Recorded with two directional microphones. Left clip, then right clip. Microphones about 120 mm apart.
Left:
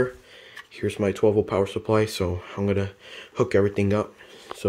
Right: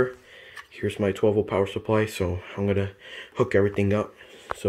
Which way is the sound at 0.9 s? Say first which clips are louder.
Left 2 dB; 10° left (ahead or behind).